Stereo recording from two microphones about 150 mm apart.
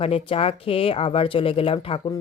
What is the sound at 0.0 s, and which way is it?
Speech, 40° left (ahead or behind).